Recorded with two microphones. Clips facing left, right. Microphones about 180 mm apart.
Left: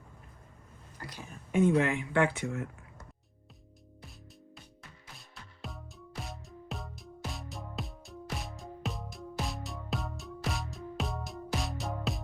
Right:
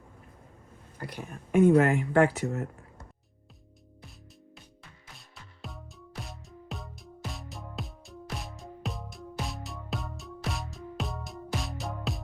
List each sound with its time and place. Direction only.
0.9 s speech: 60° right (ahead or behind); by 2.6 s 40° right (ahead or behind)
5.1 s music: centre (ahead or behind)